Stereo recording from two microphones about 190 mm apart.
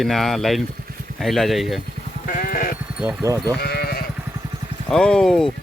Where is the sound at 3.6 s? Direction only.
55° left (ahead or behind).